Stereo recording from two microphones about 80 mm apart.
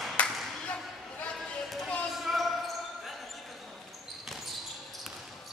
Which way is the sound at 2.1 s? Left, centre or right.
Centre.